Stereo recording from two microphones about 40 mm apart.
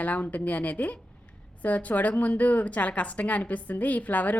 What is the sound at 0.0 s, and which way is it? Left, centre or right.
A woman's voice, left.